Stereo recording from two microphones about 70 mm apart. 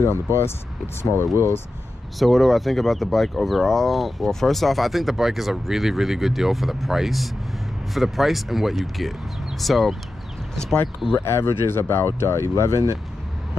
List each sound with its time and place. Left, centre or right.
1.1 s speech: right
2.1 s speech: centre
11.1 s speech: left